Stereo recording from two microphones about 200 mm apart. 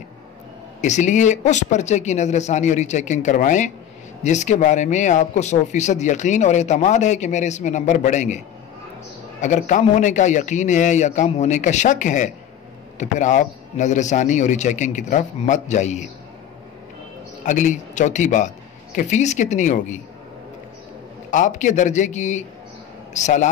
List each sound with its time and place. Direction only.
0.7 s speech: 35° left (ahead or behind)
9.4 s speech: 40° left (ahead or behind)
17.4 s speech: 40° left (ahead or behind)
21.3 s speech: 40° left (ahead or behind)